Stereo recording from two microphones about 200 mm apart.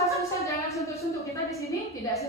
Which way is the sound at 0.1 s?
15° left (ahead or behind).